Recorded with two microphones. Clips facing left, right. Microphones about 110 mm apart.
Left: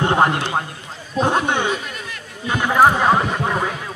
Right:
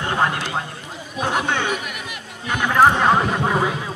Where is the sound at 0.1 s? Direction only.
30° left (ahead or behind).